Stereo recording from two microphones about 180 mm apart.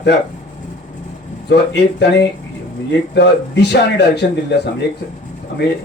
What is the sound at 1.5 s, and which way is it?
A man's voice, 70° left (ahead or behind).